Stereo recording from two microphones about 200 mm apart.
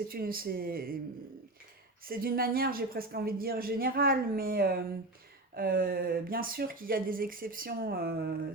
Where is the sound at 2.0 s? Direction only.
45° right (ahead or behind).